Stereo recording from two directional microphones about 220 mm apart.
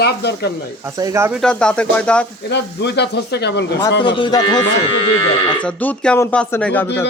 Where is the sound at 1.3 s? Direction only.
5° left (ahead or behind).